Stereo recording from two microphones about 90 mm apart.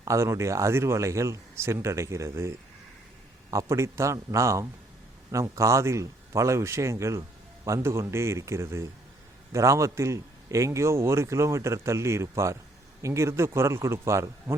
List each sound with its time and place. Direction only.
0.0 s a man's voice: 35° right (ahead or behind)
3.5 s a man's voice: 30° right (ahead or behind)